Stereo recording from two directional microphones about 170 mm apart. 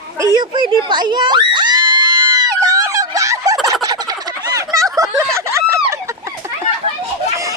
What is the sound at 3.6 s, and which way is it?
Fowl, 20° right (ahead or behind).